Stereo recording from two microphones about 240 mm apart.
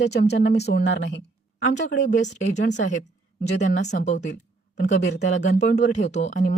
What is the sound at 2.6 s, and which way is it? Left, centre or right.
Speech, left.